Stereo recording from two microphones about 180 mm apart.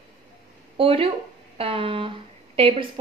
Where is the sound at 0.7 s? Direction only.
30° right (ahead or behind).